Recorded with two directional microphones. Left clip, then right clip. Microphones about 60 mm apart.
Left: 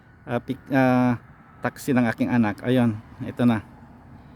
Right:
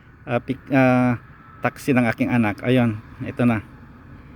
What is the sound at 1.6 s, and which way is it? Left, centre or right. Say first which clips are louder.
Speech: right 3 dB; centre.